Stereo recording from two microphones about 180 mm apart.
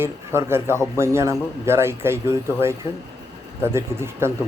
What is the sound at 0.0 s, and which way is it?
A man's voice, 15° right (ahead or behind).